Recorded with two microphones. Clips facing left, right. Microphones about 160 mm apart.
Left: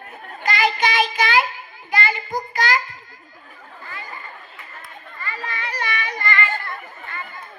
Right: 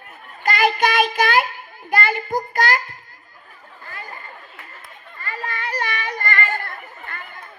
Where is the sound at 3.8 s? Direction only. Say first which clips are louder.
Even; 50° right (ahead or behind).